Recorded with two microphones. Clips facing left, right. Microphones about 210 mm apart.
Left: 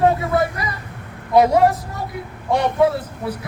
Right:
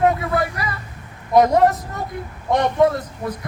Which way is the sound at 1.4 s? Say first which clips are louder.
Even; 10° left (ahead or behind).